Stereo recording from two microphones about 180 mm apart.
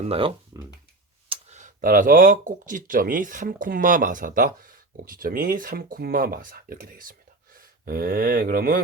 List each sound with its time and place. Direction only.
0.0 s speech: 30° right (ahead or behind); by 8.8 s 50° right (ahead or behind)